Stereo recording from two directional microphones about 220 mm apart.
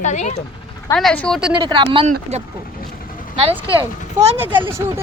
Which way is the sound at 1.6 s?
20° right (ahead or behind).